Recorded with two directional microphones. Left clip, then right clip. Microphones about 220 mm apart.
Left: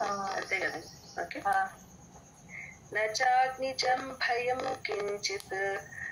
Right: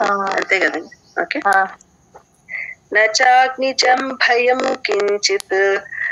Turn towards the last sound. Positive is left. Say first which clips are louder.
# right 17 dB
turn(degrees=-40)  # may be behind; listen again after turning